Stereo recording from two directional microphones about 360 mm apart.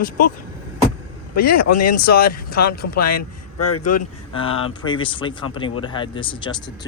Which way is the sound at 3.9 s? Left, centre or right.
Centre.